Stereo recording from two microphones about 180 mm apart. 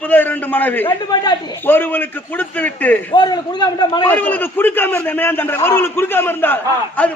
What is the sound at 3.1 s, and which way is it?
Speech, 25° left (ahead or behind).